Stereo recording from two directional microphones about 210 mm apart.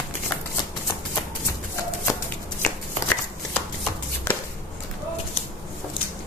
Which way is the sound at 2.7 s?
10° left (ahead or behind).